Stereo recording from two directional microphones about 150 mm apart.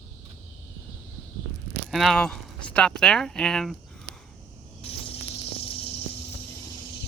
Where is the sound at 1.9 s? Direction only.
Centre (ahead or behind).